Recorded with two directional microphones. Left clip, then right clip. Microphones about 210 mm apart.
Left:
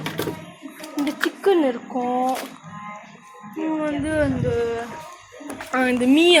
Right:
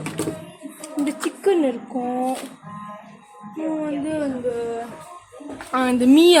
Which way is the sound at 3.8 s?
10° left (ahead or behind).